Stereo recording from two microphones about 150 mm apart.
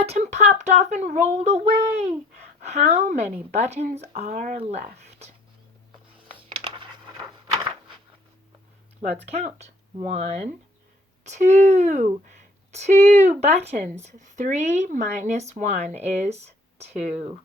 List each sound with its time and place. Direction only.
0.0 s speech: 45° right (ahead or behind)
4.3 s speech: 60° right (ahead or behind)
4.5 s speech: 45° right (ahead or behind)
6.3 s a sound: 35° right (ahead or behind)
9.0 s speech: 45° right (ahead or behind)